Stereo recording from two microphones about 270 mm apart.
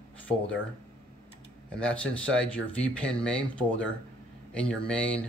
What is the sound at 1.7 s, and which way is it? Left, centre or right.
Speech, centre.